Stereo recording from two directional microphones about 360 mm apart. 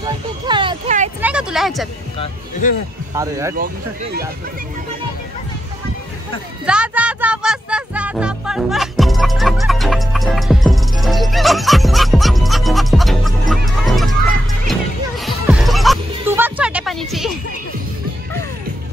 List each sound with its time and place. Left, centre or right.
0.0 s a sound: centre
1.2 s speech: centre
2.6 s a man's voice: left
3.2 s speech: centre
3.5 s speech: right
6.6 s speech: centre
15.2 s music: centre